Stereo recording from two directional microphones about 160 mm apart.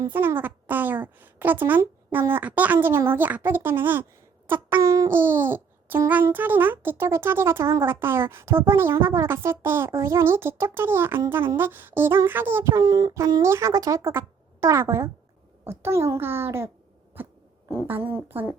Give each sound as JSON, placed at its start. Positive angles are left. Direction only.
{"t": 0.0, "sound": "a child's voice", "side_deg": -15}
{"t": 17.2, "sound": "owl", "side_deg": -15}
{"t": 17.8, "sound": "a child's voice", "side_deg": -10}